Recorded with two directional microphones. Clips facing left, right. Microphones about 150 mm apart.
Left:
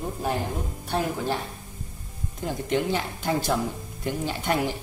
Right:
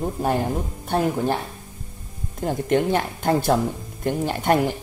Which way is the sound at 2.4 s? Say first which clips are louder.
Right 5 dB; 55° right (ahead or behind).